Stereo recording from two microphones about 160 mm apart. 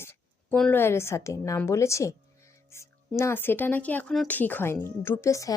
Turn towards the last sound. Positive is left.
turn(degrees=20)  # may be behind; listen again after turning